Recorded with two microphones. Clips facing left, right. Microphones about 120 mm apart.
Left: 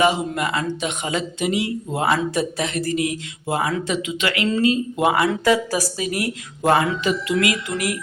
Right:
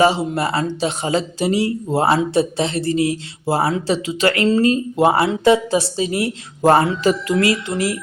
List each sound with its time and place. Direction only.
0.0 s speech: 30° right (ahead or behind)